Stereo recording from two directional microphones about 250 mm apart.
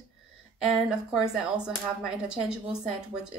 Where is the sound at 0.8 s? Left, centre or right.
Centre.